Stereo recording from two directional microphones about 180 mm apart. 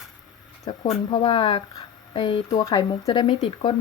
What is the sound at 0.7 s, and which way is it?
Speech, 25° left (ahead or behind).